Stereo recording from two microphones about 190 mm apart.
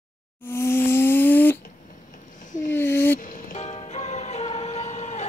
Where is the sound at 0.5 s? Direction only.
10° left (ahead or behind).